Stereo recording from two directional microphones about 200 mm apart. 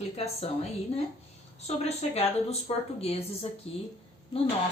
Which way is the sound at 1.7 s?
30° left (ahead or behind).